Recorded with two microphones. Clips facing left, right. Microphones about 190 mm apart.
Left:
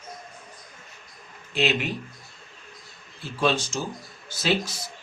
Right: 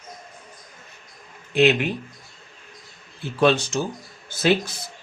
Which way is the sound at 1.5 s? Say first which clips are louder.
Right 7 dB; 55° right (ahead or behind).